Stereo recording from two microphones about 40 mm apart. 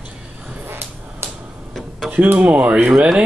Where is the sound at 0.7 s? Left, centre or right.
Right.